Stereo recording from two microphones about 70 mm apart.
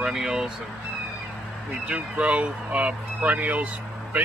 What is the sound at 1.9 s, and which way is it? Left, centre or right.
Speech, centre.